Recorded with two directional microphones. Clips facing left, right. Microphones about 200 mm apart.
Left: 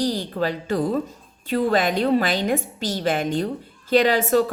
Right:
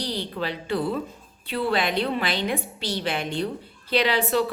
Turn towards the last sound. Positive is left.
turn(degrees=45)  # may be behind; listen again after turning